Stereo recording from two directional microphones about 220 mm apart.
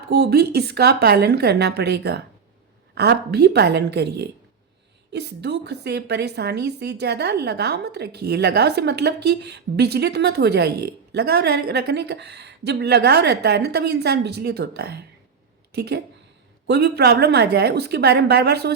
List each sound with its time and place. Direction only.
0.1 s a woman's voice: 50° right (ahead or behind)